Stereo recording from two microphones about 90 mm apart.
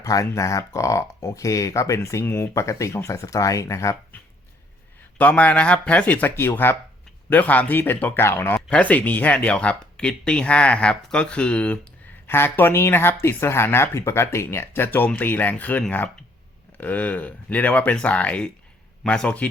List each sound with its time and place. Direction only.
0.0 s speech: 40° left (ahead or behind)
2.5 s speech: 35° left (ahead or behind)
5.1 s speech: 15° left (ahead or behind)
12.3 s speech: 25° left (ahead or behind)